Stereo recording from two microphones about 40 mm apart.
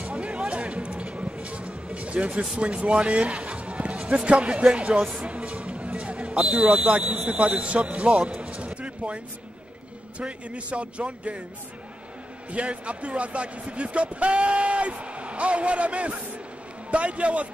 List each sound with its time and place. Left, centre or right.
0.0 s music: right
2.5 s a man's voice: right
5.2 s music: right
6.7 s a man's voice: right
12.4 s speech: right